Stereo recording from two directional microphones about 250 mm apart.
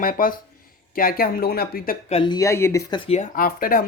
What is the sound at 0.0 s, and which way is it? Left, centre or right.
Speech, left.